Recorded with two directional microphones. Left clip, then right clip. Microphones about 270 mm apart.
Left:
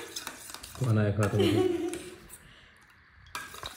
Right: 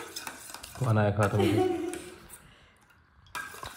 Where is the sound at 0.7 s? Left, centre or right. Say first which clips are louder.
Right 3 dB; centre.